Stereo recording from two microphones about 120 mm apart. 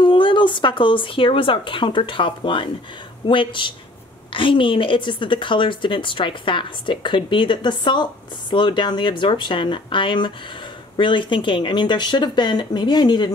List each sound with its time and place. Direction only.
0.0 s a woman's voice: 45° left (ahead or behind)